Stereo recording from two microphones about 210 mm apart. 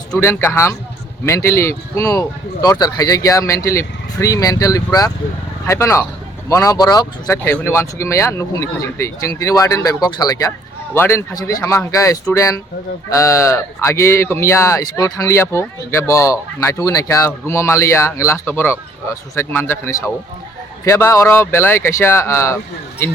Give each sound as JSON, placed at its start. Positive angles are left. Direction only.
{"t": 0.1, "sound": "speech", "side_deg": 10}